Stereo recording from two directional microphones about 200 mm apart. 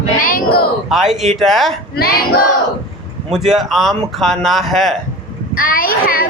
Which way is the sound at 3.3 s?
Centre (ahead or behind).